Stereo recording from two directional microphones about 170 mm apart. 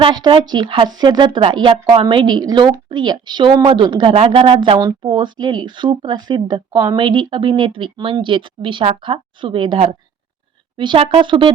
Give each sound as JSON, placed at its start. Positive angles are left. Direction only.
{"t": 0.0, "sound": "speech", "side_deg": -25}